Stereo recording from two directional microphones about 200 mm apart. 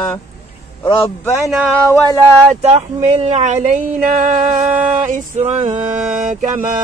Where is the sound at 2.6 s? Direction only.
30° right (ahead or behind).